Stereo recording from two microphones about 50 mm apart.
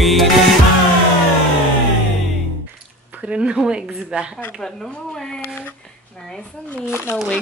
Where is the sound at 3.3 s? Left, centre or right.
Centre.